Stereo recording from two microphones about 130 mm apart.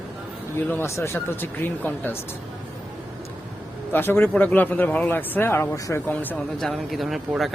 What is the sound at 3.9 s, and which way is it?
Speech, 15° left (ahead or behind).